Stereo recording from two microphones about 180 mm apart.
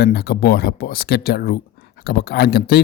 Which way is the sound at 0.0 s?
60° left (ahead or behind).